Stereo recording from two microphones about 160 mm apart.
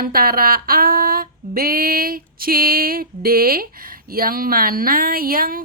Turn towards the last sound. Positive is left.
turn(degrees=-65)  # may be behind; listen again after turning